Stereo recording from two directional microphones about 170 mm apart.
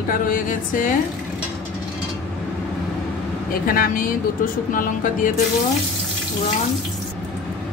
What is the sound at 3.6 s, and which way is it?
Music, 55° left (ahead or behind).